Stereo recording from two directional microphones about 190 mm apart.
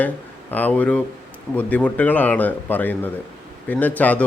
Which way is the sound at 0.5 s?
10° left (ahead or behind).